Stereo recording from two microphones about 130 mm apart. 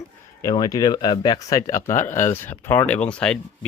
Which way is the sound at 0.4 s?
30° left (ahead or behind).